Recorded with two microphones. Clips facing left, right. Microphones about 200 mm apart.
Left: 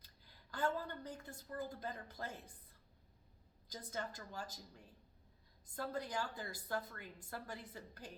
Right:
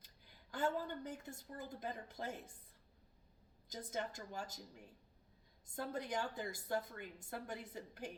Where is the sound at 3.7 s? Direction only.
20° right (ahead or behind).